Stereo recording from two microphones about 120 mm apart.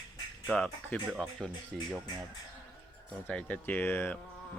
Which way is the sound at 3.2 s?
10° left (ahead or behind).